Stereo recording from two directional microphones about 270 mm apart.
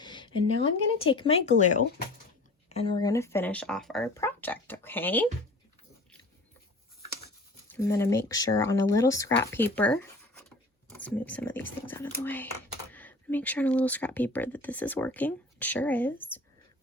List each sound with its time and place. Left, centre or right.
0.0 s a sound: centre
0.9 s speech: centre
7.7 s speech: centre